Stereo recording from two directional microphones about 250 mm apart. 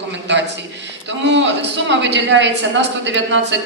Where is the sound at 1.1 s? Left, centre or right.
Right.